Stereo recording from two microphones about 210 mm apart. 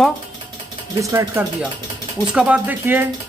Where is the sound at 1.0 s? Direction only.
15° right (ahead or behind).